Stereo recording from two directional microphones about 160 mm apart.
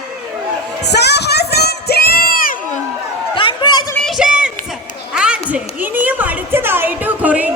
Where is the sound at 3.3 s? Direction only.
30° left (ahead or behind).